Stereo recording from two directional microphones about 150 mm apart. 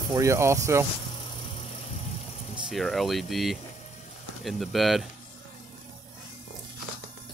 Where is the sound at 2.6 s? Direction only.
Centre (ahead or behind).